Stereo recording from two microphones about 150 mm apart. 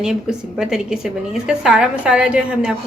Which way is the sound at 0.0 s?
5° right (ahead or behind).